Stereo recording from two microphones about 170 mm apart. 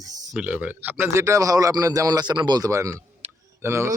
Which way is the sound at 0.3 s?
10° right (ahead or behind).